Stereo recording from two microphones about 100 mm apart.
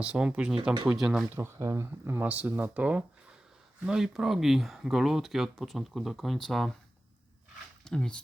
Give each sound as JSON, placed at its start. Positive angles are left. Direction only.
{"t": 0.0, "sound": "speech", "side_deg": -10}
{"t": 1.4, "sound": "speech", "side_deg": -30}
{"t": 7.9, "sound": "speech", "side_deg": 10}